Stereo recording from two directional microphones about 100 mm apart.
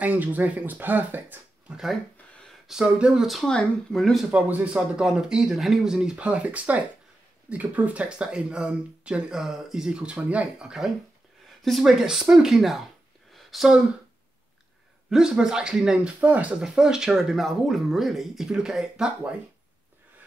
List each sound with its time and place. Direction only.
0.0 s speech: 15° right (ahead or behind)
2.7 s speech: 5° right (ahead or behind)
4.3 s speech: 15° right (ahead or behind)
15.0 s speech: 5° right (ahead or behind)